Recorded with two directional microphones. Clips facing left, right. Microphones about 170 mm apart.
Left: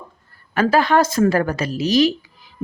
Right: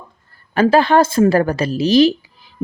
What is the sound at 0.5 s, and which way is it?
A woman's voice, 30° right (ahead or behind).